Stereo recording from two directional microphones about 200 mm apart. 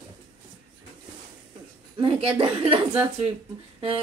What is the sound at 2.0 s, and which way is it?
Female singing, 30° right (ahead or behind).